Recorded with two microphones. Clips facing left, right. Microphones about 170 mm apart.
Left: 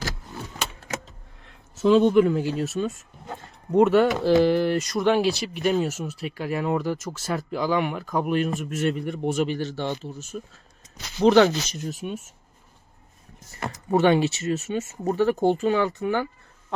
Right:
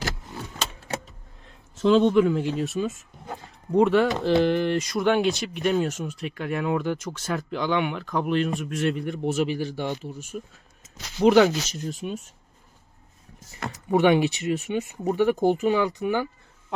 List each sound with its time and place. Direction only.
0.9 s a sound: 30° right (ahead or behind)
1.7 s speech: 5° left (ahead or behind)
13.9 s speech: 15° right (ahead or behind)